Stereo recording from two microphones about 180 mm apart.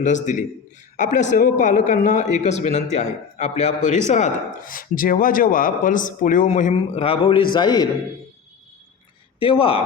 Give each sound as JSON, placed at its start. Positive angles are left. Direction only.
{"t": 0.0, "sound": "a man's voice", "side_deg": 45}
{"t": 7.0, "sound": "a man's voice", "side_deg": 30}
{"t": 9.4, "sound": "a man's voice", "side_deg": 30}